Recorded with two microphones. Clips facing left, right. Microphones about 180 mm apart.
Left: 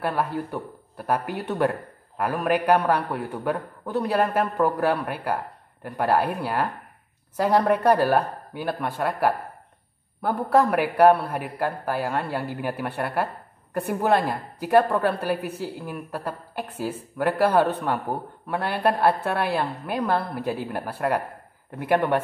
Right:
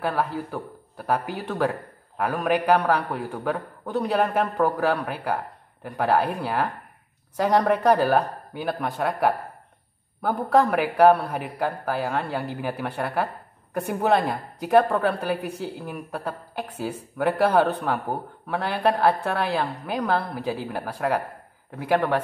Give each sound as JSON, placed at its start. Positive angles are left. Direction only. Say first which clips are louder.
{"t": 0.0, "sound": "a woman's voice", "louder": "even", "side_deg": 0}
{"t": 10.4, "sound": "a woman's voice", "louder": "even", "side_deg": 0}